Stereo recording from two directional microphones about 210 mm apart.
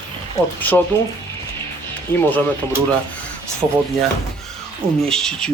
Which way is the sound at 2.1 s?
10° left (ahead or behind).